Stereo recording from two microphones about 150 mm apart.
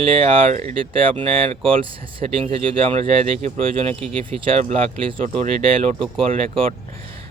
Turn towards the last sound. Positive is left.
turn(degrees=-40)  # may be behind; listen again after turning